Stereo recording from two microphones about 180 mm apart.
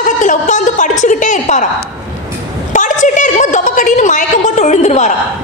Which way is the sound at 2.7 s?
45° left (ahead or behind).